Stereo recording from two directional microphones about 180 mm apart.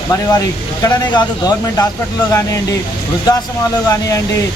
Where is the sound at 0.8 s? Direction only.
20° left (ahead or behind).